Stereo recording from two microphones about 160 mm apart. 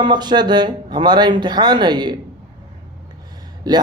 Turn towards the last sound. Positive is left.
turn(degrees=-25)  # may be behind; listen again after turning